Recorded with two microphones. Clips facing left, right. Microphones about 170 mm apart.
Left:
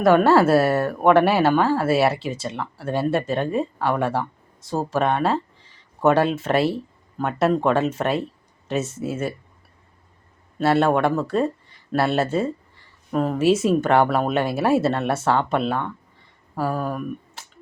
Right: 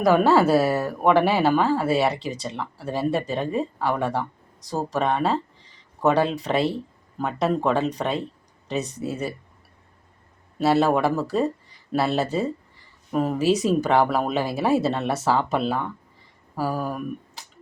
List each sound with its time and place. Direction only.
0.0 s speech: centre (ahead or behind)
10.6 s speech: centre (ahead or behind)